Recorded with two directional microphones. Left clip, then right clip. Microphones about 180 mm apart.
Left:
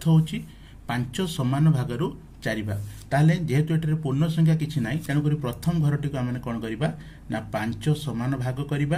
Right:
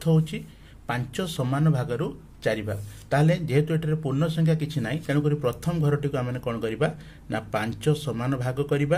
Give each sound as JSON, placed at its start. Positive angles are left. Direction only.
{"t": 0.0, "sound": "speech", "side_deg": -25}